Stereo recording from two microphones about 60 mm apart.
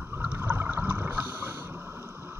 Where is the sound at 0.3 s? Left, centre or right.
Right.